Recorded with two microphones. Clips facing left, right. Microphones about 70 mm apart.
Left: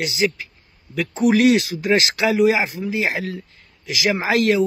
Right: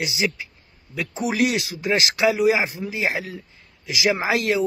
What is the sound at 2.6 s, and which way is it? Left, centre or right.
Speech, centre.